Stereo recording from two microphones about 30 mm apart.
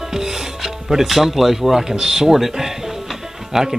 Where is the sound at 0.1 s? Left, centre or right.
Centre.